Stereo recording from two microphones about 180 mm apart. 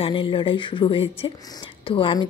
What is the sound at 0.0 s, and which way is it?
Speech, 30° left (ahead or behind).